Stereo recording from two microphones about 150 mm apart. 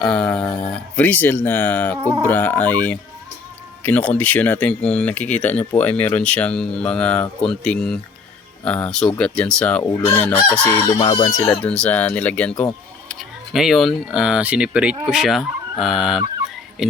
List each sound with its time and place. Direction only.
0.0 s speech: 5° left (ahead or behind)
10.8 s chicken: 20° left (ahead or behind)
11.4 s speech: 10° left (ahead or behind); by 14.9 s 5° right (ahead or behind)
15.0 s fowl: 5° right (ahead or behind)
16.8 s speech: 5° right (ahead or behind)